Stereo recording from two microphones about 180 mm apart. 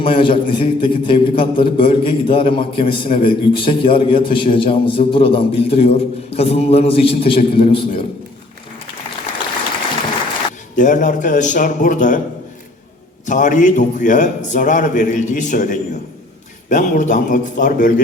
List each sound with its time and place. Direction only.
0.0 s a man's voice: 30° left (ahead or behind)
10.8 s a man's voice: 45° left (ahead or behind)
13.2 s a man's voice: 45° left (ahead or behind)